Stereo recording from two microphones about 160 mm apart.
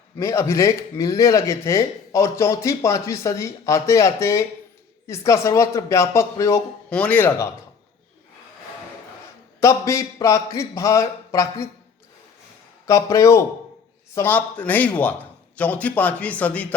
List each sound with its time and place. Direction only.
0.2 s a man's voice: 20° left (ahead or behind)
9.6 s speech: 20° left (ahead or behind)
12.9 s a man's voice: 20° left (ahead or behind)